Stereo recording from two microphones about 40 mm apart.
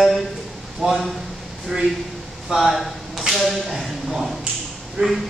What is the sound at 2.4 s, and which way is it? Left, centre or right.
Speech, centre.